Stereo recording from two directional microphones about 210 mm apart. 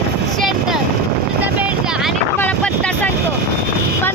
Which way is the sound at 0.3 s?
Centre (ahead or behind).